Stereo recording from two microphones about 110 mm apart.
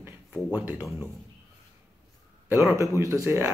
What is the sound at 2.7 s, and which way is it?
Speech, 25° right (ahead or behind).